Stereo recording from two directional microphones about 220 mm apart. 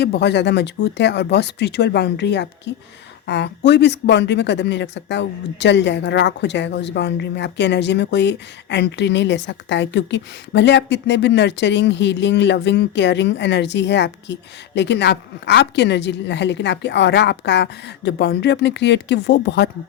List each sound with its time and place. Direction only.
0.0 s speech: 50° left (ahead or behind)